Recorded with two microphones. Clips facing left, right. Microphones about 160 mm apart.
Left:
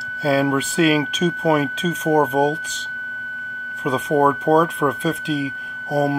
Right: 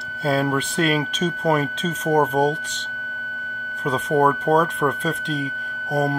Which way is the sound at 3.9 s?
Centre (ahead or behind).